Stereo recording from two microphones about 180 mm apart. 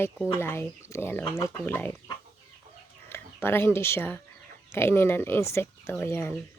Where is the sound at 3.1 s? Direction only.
10° left (ahead or behind).